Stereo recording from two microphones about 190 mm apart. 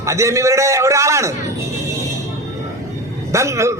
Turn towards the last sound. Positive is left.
turn(degrees=-15)  # may be behind; listen again after turning